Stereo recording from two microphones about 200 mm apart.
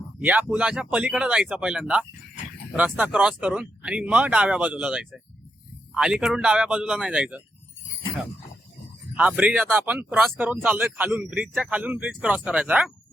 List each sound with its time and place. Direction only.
0.2 s speech: 10° right (ahead or behind)
9.1 s speech: 5° right (ahead or behind)